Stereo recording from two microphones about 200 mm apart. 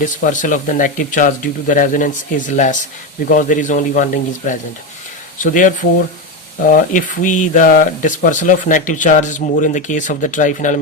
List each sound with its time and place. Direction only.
0.0 s speech: 40° left (ahead or behind)